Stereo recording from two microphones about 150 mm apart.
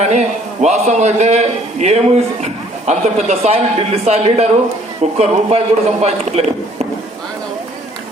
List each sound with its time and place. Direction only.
0.0 s a man's voice: 50° right (ahead or behind)